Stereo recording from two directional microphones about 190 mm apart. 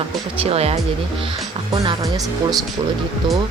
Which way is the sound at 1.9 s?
20° right (ahead or behind).